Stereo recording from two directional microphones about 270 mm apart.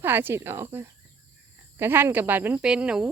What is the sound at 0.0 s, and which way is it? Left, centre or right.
Speech, centre.